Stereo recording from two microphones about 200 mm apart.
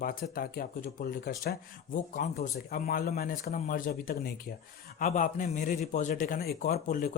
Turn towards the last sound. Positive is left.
turn(degrees=45)  # may be behind; listen again after turning